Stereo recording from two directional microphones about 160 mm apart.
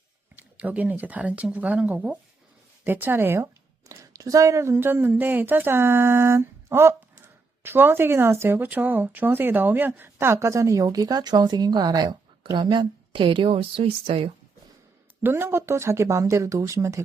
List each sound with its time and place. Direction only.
0.3 s speech: 10° right (ahead or behind); by 14.3 s 35° right (ahead or behind)
15.2 s speech: 15° right (ahead or behind)